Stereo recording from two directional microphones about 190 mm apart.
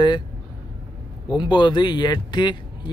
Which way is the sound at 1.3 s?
25° left (ahead or behind).